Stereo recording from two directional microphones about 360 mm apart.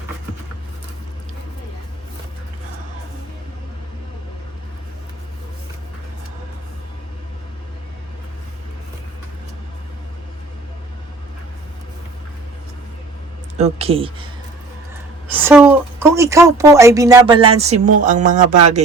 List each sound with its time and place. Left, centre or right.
13.6 s a woman's voice: centre
15.3 s a woman's voice: centre; by 18.4 s right